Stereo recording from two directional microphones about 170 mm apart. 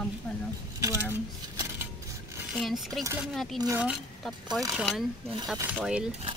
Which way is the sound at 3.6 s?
20° right (ahead or behind).